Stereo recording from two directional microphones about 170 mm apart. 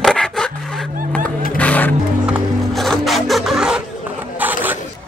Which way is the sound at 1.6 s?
10° left (ahead or behind).